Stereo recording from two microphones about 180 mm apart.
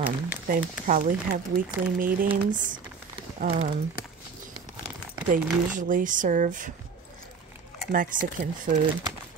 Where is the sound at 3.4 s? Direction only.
45° right (ahead or behind).